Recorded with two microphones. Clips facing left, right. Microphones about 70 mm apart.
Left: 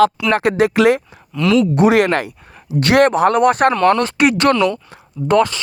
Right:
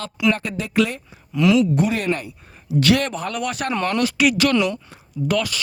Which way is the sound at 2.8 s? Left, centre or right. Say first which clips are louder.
Left 8 dB; left.